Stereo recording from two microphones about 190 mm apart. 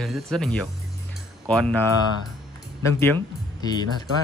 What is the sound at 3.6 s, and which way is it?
Speech, 20° left (ahead or behind).